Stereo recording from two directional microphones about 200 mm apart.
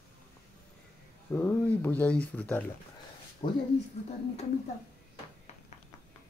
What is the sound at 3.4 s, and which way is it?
Speech, 25° left (ahead or behind).